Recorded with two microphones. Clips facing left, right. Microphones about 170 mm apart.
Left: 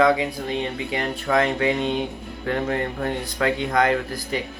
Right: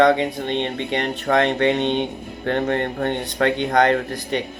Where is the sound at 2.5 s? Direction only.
40° right (ahead or behind).